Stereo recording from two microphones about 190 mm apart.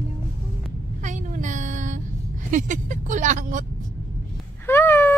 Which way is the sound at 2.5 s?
40° right (ahead or behind).